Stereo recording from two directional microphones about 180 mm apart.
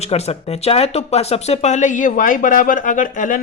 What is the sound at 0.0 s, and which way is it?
Speech, 35° left (ahead or behind).